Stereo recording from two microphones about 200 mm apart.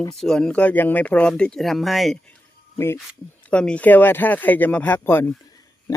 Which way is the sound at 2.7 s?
15° left (ahead or behind).